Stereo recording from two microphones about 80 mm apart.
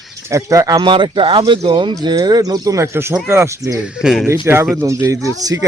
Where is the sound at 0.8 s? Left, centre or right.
Right.